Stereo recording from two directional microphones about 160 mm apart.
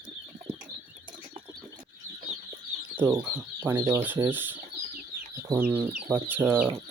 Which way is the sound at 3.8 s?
15° right (ahead or behind).